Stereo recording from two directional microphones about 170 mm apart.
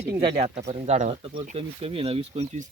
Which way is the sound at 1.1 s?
30° right (ahead or behind).